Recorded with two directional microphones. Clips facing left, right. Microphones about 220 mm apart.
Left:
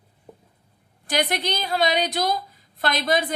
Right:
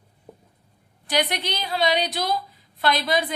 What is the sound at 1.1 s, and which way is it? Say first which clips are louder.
Speech: left 1 dB; 45° left (ahead or behind).